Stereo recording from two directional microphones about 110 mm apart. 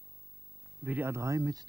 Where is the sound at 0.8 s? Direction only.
20° right (ahead or behind).